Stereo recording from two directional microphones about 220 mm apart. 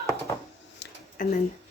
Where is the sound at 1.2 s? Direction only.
40° left (ahead or behind).